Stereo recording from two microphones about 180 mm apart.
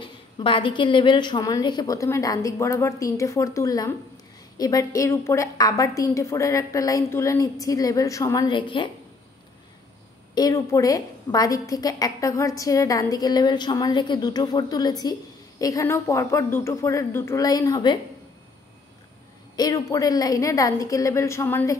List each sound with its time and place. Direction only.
0.0 s a woman's voice: 30° left (ahead or behind)
10.3 s a woman's voice: 20° left (ahead or behind)
19.5 s a woman's voice: 20° left (ahead or behind)